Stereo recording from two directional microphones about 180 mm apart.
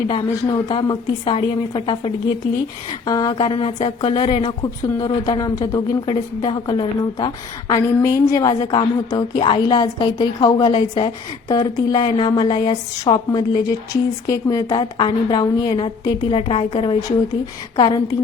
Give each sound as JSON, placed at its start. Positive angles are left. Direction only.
{"t": 0.7, "sound": "a woman's voice", "side_deg": 30}
{"t": 3.1, "sound": "a woman's voice", "side_deg": 20}